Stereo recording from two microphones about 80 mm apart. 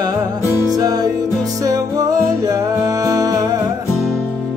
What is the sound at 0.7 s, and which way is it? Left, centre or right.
Music, right.